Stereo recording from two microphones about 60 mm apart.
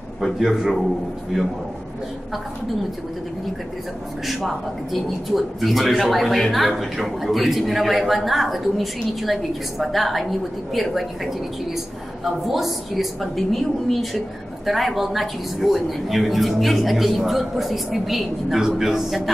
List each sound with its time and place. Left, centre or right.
0.2 s a man's voice: centre
4.3 s a man's voice: centre